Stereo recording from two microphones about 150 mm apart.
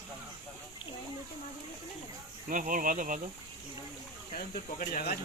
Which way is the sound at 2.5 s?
60° right (ahead or behind).